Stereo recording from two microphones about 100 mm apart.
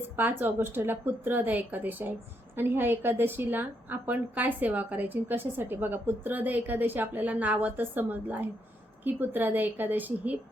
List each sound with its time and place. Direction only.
0.2 s a woman's voice: 20° right (ahead or behind)